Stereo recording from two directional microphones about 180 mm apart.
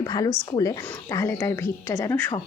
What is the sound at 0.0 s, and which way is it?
Speech, 20° left (ahead or behind).